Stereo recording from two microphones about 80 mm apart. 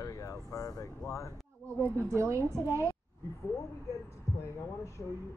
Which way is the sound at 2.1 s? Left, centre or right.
Right.